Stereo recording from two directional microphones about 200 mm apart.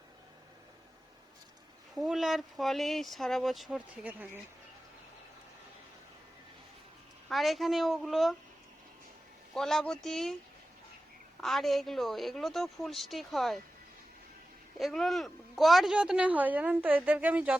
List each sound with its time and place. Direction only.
2.0 s a woman's voice: centre (ahead or behind)
7.3 s a woman's voice: centre (ahead or behind)
9.6 s a woman's voice: 5° left (ahead or behind)
11.3 s a woman's voice: centre (ahead or behind)
14.8 s a woman's voice: centre (ahead or behind)